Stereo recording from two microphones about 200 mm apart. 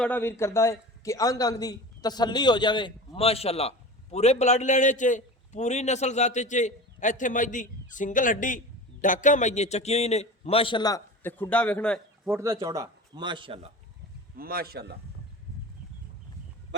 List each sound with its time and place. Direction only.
0.0 s a man's voice: 10° left (ahead or behind)
12.3 s speech: 15° right (ahead or behind)
14.3 s a man's voice: 50° right (ahead or behind)